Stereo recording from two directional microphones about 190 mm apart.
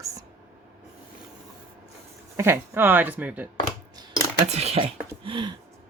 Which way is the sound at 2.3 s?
15° right (ahead or behind).